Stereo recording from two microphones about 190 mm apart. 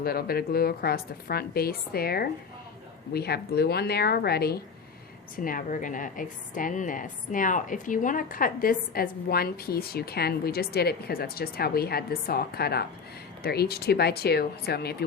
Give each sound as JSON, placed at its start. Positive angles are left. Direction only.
{"t": 0.0, "sound": "a woman's voice", "side_deg": 50}
{"t": 5.4, "sound": "a woman's voice", "side_deg": 45}